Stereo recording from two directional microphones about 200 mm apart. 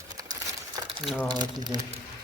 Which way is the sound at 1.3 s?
20° right (ahead or behind).